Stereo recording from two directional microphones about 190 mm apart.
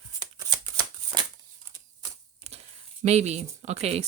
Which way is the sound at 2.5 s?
35° right (ahead or behind).